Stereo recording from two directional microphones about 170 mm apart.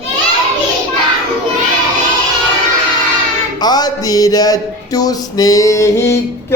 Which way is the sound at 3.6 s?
25° left (ahead or behind).